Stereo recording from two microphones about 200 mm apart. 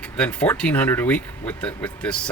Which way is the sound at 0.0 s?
5° left (ahead or behind).